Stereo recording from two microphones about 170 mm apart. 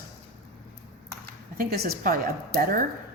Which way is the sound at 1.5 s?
65° right (ahead or behind).